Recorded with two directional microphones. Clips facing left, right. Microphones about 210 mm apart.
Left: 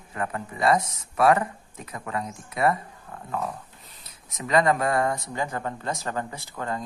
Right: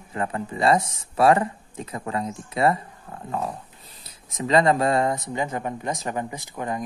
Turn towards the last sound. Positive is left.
turn(degrees=-15)  # may be behind; listen again after turning